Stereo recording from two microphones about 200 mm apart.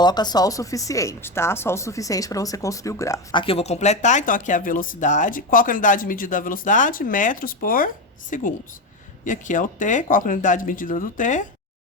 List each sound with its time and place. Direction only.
0.0 s speech: 20° left (ahead or behind)
3.4 s speech: 30° left (ahead or behind)